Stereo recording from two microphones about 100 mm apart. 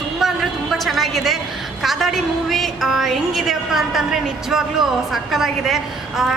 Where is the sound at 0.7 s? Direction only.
Centre (ahead or behind).